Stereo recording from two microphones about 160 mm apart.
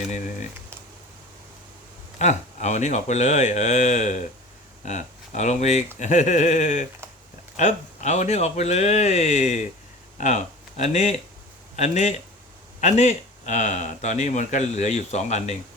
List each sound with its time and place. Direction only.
2.1 s speech: 45° left (ahead or behind)